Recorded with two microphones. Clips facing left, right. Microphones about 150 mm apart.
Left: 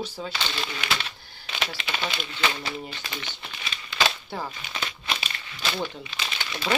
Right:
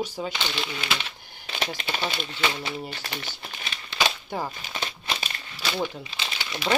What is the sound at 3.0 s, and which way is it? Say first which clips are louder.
Speech: right 1 dB; 45° right (ahead or behind).